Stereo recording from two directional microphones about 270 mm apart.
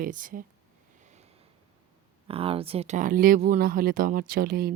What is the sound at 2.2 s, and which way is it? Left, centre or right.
Speech, right.